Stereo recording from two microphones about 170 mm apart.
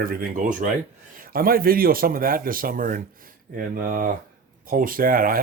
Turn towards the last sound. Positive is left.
turn(degrees=-55)  # may be behind; listen again after turning